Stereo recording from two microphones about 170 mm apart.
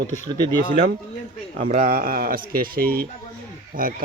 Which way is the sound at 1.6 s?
55° right (ahead or behind).